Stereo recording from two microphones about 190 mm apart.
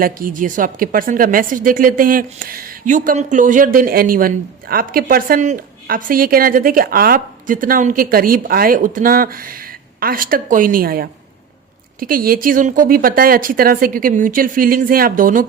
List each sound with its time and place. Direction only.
0.0 s speech: 45° right (ahead or behind)